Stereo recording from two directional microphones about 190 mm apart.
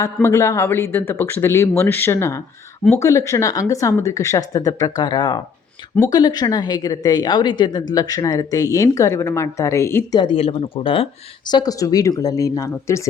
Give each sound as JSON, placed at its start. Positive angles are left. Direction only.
{"t": 0.0, "sound": "a woman's voice", "side_deg": 15}